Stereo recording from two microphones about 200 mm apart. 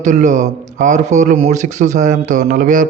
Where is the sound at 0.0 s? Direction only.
40° right (ahead or behind).